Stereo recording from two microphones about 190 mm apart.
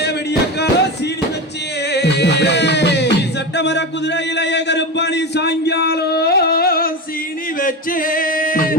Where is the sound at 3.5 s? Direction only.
65° left (ahead or behind).